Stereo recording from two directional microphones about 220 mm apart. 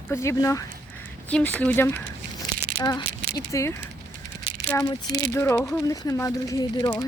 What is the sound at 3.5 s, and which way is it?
Speech, 15° left (ahead or behind).